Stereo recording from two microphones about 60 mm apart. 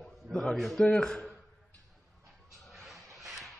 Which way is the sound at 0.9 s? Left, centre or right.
Centre.